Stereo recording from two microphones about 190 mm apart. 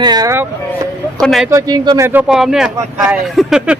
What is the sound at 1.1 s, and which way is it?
Speech, centre (ahead or behind).